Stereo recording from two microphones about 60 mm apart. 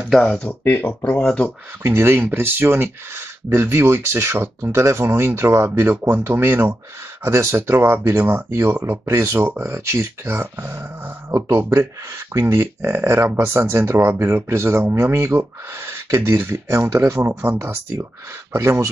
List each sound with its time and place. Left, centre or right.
0.0 s speech: centre
0.5 s speech: left
1.1 s speech: centre
1.8 s speech: right
7.2 s speech: right
17.4 s speech: right